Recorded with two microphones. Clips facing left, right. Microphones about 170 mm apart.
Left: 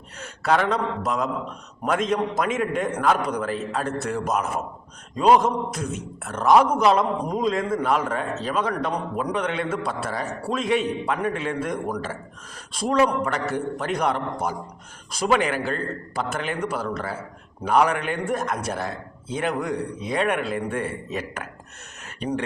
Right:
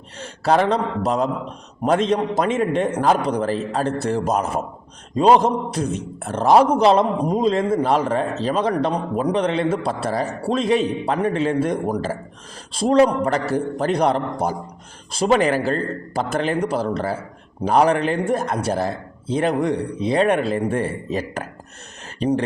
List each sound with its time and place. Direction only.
0.2 s a man's voice: 30° right (ahead or behind)